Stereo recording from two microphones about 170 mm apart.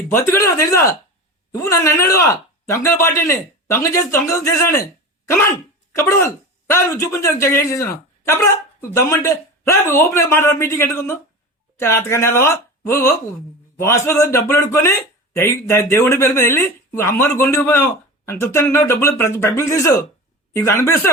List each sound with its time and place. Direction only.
0.1 s speech: 15° left (ahead or behind)
5.9 s speech: 15° left (ahead or behind)